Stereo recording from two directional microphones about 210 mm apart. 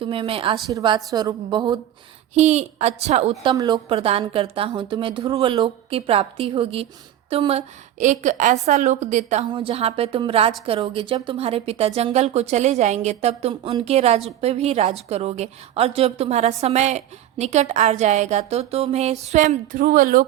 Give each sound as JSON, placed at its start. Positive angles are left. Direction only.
{"t": 0.0, "sound": "speech", "side_deg": -25}
{"t": 2.3, "sound": "a woman's voice", "side_deg": -30}
{"t": 3.5, "sound": "a woman's voice", "side_deg": -20}
{"t": 9.5, "sound": "a woman's voice", "side_deg": -25}